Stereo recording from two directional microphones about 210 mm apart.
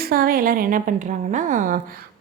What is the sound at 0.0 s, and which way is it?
A woman's voice, 45° right (ahead or behind).